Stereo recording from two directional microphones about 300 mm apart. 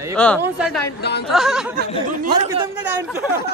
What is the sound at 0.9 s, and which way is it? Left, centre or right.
Speech, left.